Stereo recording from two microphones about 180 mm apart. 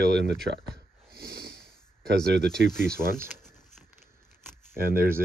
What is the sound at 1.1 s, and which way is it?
Snort, 60° right (ahead or behind).